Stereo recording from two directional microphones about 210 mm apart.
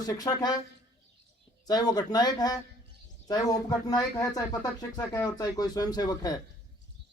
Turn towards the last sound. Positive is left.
turn(degrees=20)  # may be behind; listen again after turning